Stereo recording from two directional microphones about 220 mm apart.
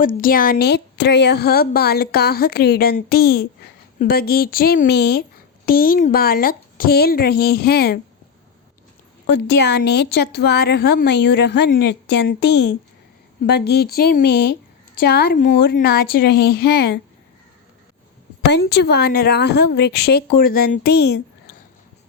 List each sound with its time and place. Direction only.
0.0 s speech: 40° left (ahead or behind)
9.2 s speech: 50° left (ahead or behind)
18.5 s speech: 50° left (ahead or behind)